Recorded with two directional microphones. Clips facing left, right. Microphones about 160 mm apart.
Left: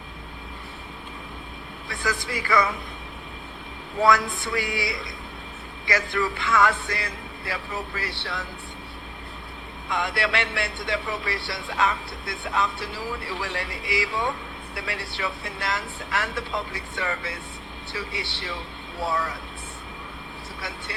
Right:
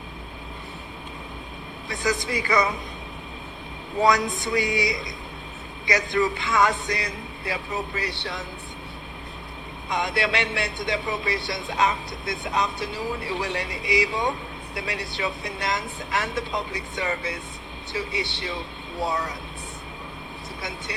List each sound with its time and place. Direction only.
1.9 s speech: 20° right (ahead or behind)
4.0 s speech: 20° right (ahead or behind)
9.9 s speech: 20° right (ahead or behind)
20.6 s speech: 20° right (ahead or behind)